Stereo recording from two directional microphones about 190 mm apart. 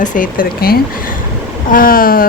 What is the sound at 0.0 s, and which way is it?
A woman's voice, 45° left (ahead or behind).